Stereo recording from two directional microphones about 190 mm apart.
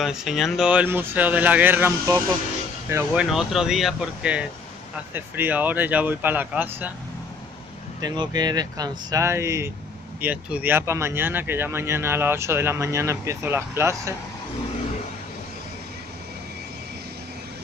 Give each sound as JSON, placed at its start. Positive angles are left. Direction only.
{"t": 0.0, "sound": "speech", "side_deg": 0}
{"t": 3.3, "sound": "speech", "side_deg": 0}
{"t": 8.0, "sound": "speech", "side_deg": -20}